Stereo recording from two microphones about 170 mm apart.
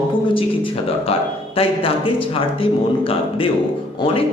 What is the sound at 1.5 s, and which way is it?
Speech, 35° left (ahead or behind).